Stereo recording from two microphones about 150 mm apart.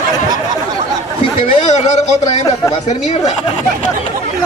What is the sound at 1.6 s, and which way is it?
A man's voice, 50° left (ahead or behind).